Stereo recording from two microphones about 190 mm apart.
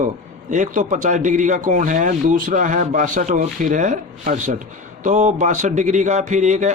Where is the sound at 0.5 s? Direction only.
40° right (ahead or behind).